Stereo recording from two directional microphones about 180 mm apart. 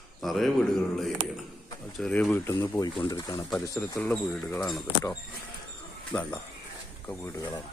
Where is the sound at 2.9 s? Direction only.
25° left (ahead or behind); by 4.8 s 5° left (ahead or behind).